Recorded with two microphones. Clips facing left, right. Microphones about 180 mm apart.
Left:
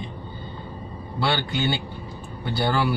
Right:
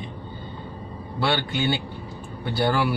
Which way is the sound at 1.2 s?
5° right (ahead or behind).